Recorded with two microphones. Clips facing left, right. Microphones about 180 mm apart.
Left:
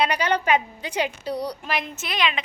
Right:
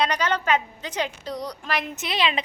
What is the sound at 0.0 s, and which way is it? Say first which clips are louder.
A woman's voice: left 2 dB; 10° left (ahead or behind).